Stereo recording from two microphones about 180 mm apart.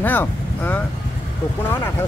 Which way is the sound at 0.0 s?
10° left (ahead or behind).